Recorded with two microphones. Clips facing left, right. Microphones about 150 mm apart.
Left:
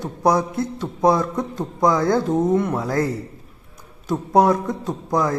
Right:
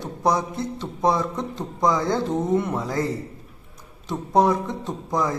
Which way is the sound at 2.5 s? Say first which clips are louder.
Left 3 dB; centre (ahead or behind).